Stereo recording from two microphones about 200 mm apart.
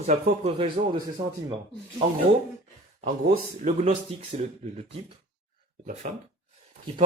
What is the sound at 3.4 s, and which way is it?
Speech, 35° right (ahead or behind).